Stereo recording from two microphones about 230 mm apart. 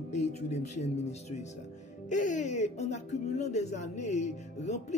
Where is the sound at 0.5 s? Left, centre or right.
Left.